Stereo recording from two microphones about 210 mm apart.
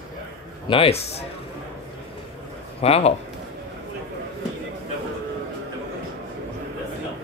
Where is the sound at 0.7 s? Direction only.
25° left (ahead or behind).